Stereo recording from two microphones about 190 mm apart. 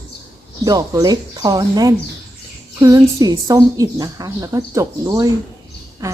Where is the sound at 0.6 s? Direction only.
20° right (ahead or behind).